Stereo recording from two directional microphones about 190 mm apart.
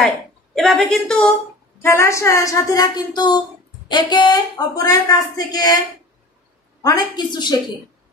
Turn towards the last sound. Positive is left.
turn(degrees=20)  # may be behind; listen again after turning